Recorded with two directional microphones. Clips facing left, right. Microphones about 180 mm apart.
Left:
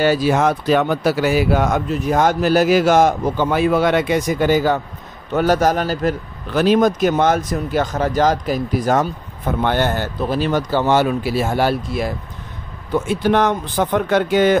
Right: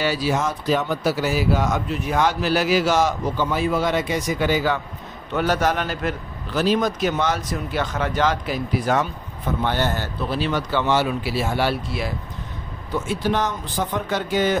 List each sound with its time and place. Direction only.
0.0 s speech: 50° left (ahead or behind)
2.0 s a man's voice: 45° left (ahead or behind)
6.5 s a man's voice: 55° left (ahead or behind); by 9.1 s 40° left (ahead or behind)
9.6 s a man's voice: 55° left (ahead or behind)
12.9 s speech: 55° left (ahead or behind)